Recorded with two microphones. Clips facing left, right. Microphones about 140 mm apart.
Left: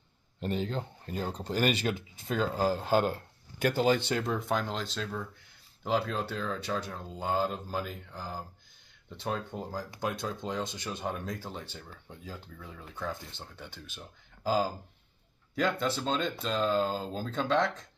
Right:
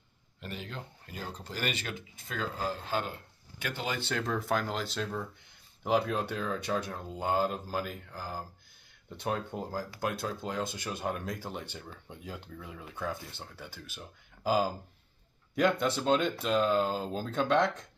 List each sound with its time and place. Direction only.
0.4 s speech: 35° left (ahead or behind)
4.2 s speech: centre (ahead or behind)